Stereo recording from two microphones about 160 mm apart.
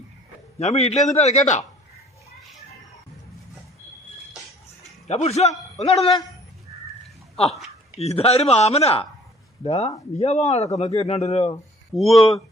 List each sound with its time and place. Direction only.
0.6 s a man's voice: 40° left (ahead or behind)
5.0 s a man's voice: 40° left (ahead or behind)
7.3 s speech: 35° left (ahead or behind)
11.9 s speech: centre (ahead or behind)